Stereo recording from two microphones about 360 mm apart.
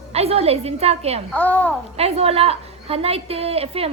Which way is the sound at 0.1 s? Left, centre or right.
Centre.